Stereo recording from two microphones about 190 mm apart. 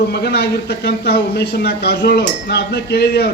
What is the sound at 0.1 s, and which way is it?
Speech, 60° left (ahead or behind).